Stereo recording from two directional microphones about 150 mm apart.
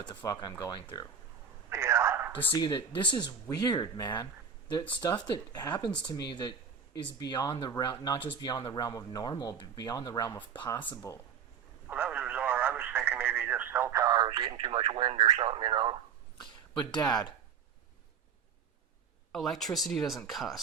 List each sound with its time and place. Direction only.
0.0 s speech: 30° left (ahead or behind)
1.7 s a sound: 20° right (ahead or behind)
2.5 s speech: 30° left (ahead or behind)
11.9 s radio: 10° right (ahead or behind)
14.3 s speech: 30° right (ahead or behind)
19.3 s speech: centre (ahead or behind)